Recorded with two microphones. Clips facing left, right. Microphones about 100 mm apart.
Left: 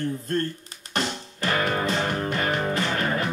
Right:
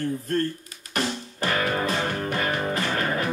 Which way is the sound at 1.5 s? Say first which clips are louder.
Left 1 dB; 25° left (ahead or behind).